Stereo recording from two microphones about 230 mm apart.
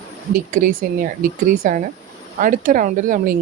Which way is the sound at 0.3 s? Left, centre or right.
Right.